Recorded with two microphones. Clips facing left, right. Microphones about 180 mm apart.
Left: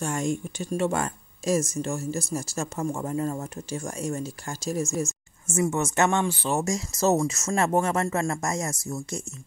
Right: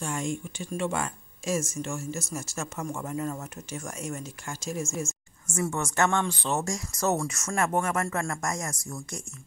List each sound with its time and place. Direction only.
0.0 s speech: 45° left (ahead or behind)
5.5 s speech: 20° left (ahead or behind)
6.2 s speech: 5° left (ahead or behind)
6.6 s speech: 20° left (ahead or behind)